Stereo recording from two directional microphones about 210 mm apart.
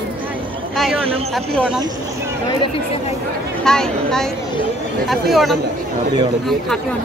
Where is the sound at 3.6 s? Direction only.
5° left (ahead or behind).